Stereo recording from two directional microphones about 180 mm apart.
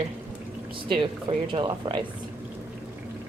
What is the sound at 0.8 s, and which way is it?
Speech, 30° right (ahead or behind).